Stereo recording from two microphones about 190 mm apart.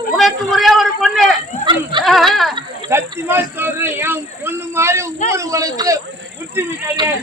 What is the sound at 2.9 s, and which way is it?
Speech, 10° right (ahead or behind).